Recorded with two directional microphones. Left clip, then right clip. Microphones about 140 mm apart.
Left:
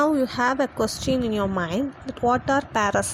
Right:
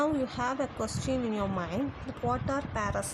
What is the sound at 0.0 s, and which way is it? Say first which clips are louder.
A woman's voice: left 9 dB; 45° left (ahead or behind).